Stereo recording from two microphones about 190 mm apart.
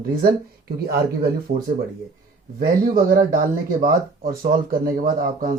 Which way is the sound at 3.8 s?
50° right (ahead or behind).